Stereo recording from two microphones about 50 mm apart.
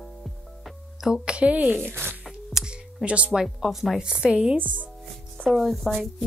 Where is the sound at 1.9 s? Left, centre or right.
Right.